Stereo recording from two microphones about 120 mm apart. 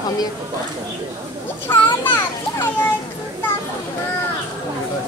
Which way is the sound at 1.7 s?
20° left (ahead or behind).